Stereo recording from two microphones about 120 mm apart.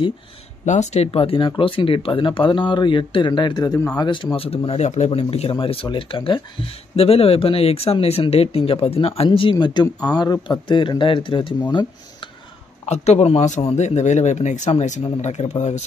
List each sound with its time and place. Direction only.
0.7 s speech: 70° left (ahead or behind); by 11.5 s 45° left (ahead or behind)
12.8 s speech: 65° left (ahead or behind)